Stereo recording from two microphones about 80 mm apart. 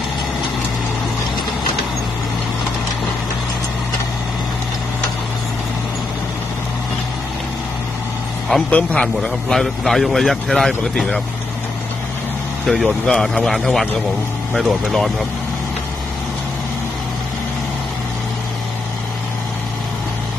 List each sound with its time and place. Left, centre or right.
8.7 s a man's voice: centre
12.6 s a man's voice: centre